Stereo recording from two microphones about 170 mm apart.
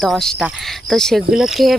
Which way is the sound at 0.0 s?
Centre (ahead or behind).